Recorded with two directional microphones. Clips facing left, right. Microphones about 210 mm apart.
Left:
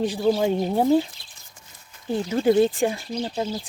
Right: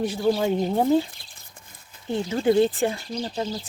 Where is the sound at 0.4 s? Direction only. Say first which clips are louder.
Left 1 dB; 15° left (ahead or behind).